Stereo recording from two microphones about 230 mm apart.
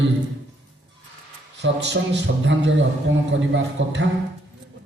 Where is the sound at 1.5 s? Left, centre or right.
Right.